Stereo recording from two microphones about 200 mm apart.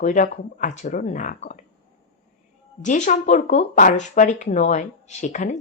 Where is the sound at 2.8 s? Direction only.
40° left (ahead or behind).